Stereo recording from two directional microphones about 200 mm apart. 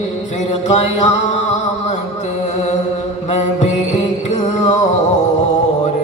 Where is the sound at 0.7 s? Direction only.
35° left (ahead or behind).